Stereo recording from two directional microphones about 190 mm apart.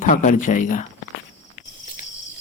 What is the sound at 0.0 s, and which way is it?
Speech, 40° left (ahead or behind).